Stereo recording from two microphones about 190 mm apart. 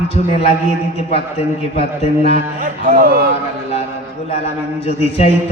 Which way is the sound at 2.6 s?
50° right (ahead or behind).